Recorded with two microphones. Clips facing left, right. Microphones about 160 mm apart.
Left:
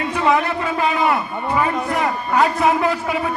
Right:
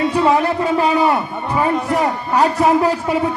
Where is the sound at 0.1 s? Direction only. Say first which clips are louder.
Right 3 dB; 35° right (ahead or behind).